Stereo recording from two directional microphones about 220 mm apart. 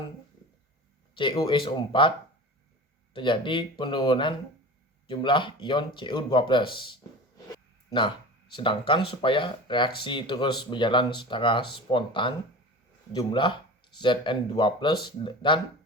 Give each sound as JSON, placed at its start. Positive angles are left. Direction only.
{"t": 1.1, "sound": "speech", "side_deg": 20}